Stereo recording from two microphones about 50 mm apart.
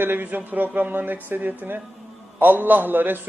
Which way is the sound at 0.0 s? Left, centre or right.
Right.